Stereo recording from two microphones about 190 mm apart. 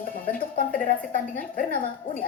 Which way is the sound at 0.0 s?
50° left (ahead or behind).